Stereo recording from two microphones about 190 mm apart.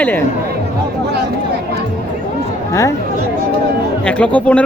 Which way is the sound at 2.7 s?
15° left (ahead or behind).